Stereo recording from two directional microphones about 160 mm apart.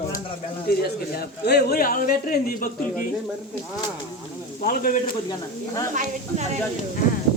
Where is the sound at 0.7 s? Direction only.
75° left (ahead or behind).